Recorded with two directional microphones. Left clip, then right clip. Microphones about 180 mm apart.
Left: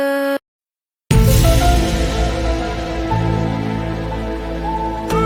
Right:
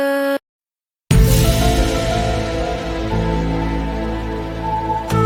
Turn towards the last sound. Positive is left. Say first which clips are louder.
# even
turn(degrees=0)  # may be behind; listen again after turning